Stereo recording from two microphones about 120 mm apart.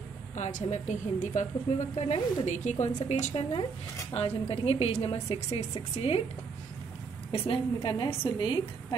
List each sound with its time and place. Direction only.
0.4 s a woman's voice: 85° left
2.4 s a woman's voice: 90° left
4.1 s a woman's voice: 55° left (ahead or behind)
7.3 s a woman's voice: 50° left (ahead or behind)